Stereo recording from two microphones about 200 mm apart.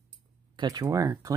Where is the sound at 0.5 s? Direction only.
20° right (ahead or behind).